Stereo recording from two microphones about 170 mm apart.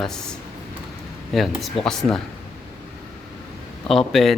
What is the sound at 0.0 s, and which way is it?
Speech, 5° left (ahead or behind).